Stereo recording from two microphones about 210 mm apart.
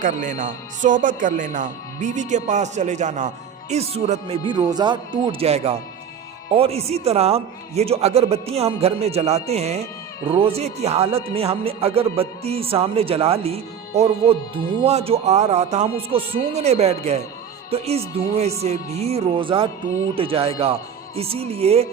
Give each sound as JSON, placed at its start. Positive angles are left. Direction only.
{"t": 0.0, "sound": "speech", "side_deg": -40}